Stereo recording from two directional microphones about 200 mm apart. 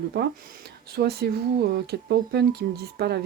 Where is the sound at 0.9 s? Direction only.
50° right (ahead or behind).